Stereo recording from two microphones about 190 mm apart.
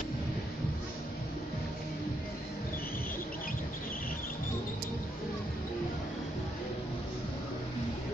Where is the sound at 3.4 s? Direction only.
50° left (ahead or behind).